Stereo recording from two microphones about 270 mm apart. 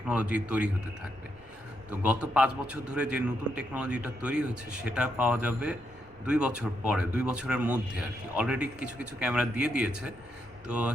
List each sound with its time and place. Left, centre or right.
0.1 s a man's voice: centre
1.9 s a man's voice: centre